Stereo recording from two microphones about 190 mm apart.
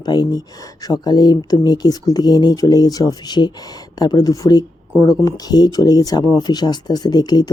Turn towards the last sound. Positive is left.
turn(degrees=20)  # may be behind; listen again after turning